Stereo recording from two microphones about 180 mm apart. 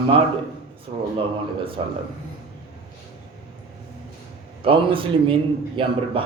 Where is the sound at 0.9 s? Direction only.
30° right (ahead or behind).